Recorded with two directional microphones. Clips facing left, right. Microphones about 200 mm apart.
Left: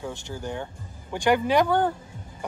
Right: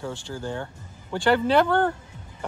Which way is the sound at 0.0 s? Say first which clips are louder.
Right 1 dB; 15° left (ahead or behind).